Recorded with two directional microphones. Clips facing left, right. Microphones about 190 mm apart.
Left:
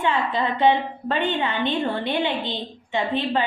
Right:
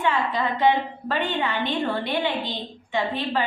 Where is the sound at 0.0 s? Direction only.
25° left (ahead or behind).